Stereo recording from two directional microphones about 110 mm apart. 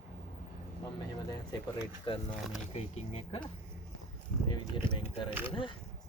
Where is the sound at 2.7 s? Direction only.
80° left.